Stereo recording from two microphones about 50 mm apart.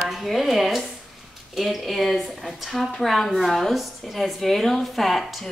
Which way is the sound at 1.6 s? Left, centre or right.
Centre.